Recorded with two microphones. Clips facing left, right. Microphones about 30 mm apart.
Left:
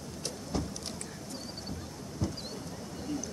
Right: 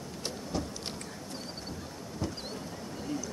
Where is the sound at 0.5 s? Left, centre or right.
Centre.